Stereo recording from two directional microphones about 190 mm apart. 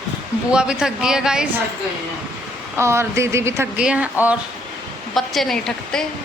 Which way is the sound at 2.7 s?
15° right (ahead or behind).